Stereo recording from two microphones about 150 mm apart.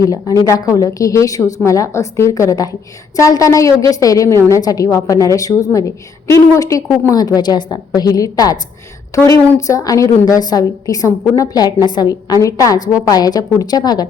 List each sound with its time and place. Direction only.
0.0 s a woman's voice: 25° left (ahead or behind)